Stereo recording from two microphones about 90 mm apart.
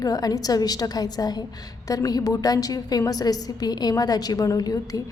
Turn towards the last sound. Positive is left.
turn(degrees=45)  # may be behind; listen again after turning